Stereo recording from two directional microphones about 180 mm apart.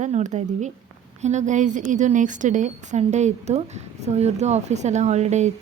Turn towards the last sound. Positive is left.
turn(degrees=-40)  # may be behind; listen again after turning